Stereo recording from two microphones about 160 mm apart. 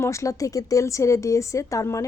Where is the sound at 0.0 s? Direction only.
20° left (ahead or behind).